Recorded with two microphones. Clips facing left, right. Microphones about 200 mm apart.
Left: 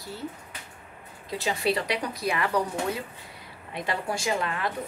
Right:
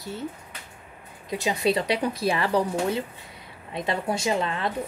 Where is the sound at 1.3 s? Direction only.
20° right (ahead or behind).